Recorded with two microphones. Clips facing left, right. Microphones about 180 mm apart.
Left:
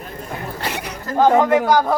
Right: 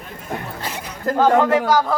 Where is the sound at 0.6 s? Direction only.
75° left (ahead or behind).